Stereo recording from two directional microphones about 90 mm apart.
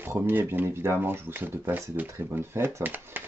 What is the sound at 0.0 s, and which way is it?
Speech, 25° right (ahead or behind).